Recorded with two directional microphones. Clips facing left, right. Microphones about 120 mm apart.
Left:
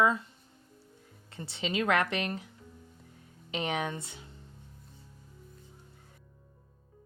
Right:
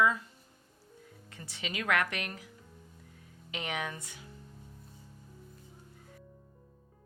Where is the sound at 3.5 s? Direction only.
30° left (ahead or behind).